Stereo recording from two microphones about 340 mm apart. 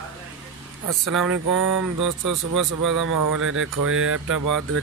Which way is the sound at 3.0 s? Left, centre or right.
Right.